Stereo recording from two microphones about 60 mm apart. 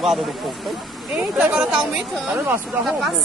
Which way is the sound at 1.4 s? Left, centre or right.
Centre.